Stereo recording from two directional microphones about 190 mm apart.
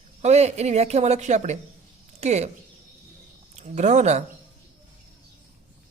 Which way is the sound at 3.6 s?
40° right (ahead or behind).